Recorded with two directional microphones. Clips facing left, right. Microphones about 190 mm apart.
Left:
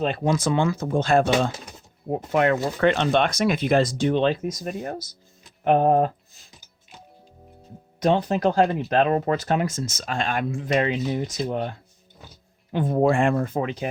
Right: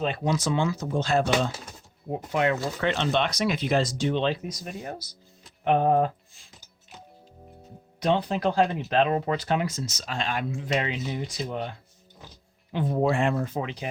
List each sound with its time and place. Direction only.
0.0 s speech: 50° left (ahead or behind)
7.9 s speech: 45° left (ahead or behind)
12.7 s speech: 50° left (ahead or behind)